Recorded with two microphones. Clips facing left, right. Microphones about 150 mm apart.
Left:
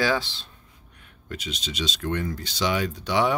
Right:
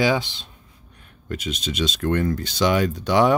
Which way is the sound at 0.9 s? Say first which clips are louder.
Right 6 dB; 45° right (ahead or behind).